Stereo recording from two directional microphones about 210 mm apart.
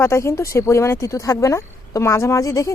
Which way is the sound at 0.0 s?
10° left (ahead or behind).